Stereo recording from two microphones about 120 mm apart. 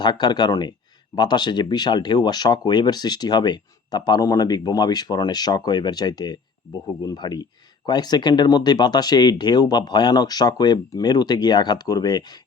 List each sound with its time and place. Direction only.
0.0 s speech: 40° left (ahead or behind)